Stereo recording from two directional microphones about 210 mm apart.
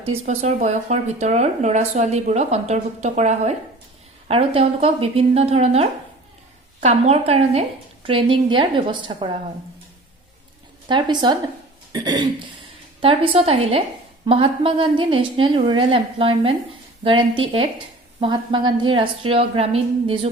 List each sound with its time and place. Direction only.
0.1 s a woman's voice: 30° right (ahead or behind)
10.8 s a woman's voice: 20° right (ahead or behind)